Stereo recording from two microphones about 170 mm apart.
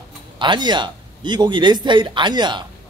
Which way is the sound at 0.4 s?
25° right (ahead or behind).